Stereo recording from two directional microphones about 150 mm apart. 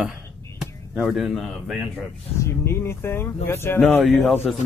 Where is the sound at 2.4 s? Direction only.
15° left (ahead or behind).